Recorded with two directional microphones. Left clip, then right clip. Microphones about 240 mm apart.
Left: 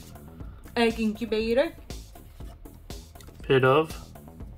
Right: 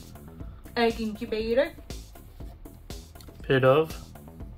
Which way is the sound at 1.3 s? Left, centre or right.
Left.